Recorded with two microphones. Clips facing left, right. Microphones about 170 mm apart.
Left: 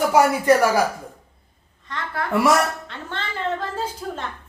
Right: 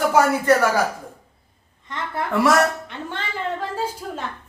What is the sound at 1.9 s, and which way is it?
A woman's voice, 20° right (ahead or behind).